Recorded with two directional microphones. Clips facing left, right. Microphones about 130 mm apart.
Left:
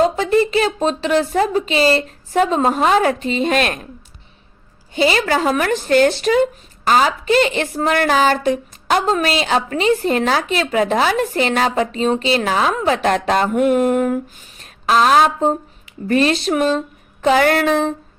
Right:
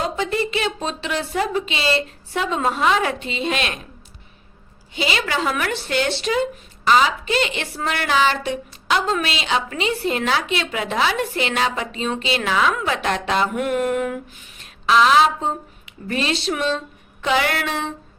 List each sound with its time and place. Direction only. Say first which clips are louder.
0.0 s speech: left 8 dB; 40° left (ahead or behind)
4.9 s speech: left 7 dB; 40° left (ahead or behind)